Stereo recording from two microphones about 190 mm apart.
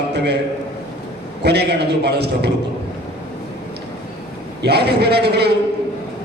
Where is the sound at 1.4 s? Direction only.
60° right (ahead or behind).